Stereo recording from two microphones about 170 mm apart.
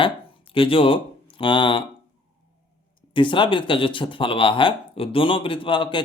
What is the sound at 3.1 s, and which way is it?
Speech, 30° left (ahead or behind).